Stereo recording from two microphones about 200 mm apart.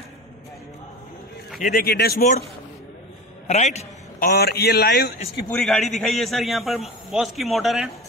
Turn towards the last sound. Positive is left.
turn(degrees=0)  # may be behind; listen again after turning